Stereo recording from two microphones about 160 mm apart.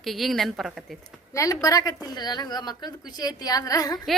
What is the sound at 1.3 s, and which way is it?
A woman's voice, 20° left (ahead or behind).